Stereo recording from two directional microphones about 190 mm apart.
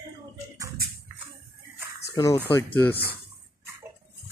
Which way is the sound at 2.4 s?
10° left (ahead or behind).